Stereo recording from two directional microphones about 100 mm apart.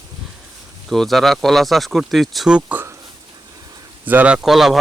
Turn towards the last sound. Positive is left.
turn(degrees=0)  # may be behind; listen again after turning